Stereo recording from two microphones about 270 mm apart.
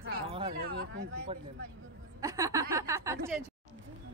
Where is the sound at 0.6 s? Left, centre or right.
Right.